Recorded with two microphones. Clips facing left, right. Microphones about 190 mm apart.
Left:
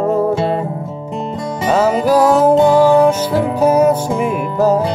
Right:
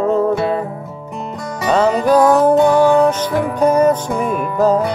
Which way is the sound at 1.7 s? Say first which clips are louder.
Even; 5° left (ahead or behind).